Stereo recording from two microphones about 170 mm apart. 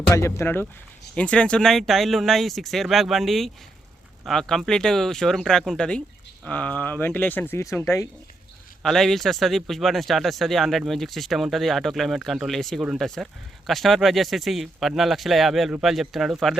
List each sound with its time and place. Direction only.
0.1 s speech: 15° left (ahead or behind)
8.8 s speech: 5° left (ahead or behind)